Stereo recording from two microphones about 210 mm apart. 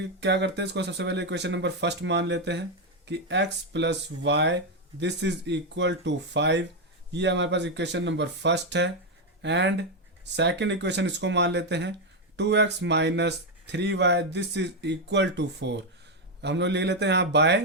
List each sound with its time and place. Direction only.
0.0 s speech: 55° right (ahead or behind)